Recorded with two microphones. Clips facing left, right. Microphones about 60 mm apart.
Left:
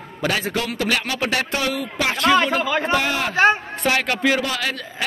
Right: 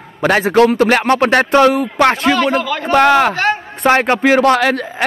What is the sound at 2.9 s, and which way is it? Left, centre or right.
Speech, right.